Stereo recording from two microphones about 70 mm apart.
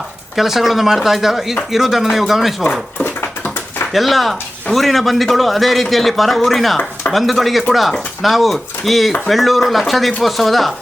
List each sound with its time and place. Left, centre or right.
0.3 s a man's voice: centre
3.0 s dog: left
3.9 s a man's voice: centre